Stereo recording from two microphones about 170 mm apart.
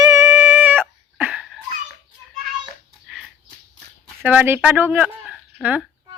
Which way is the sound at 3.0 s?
5° right (ahead or behind).